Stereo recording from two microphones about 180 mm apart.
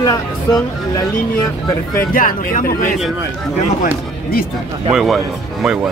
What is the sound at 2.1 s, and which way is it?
Speech, 50° left (ahead or behind).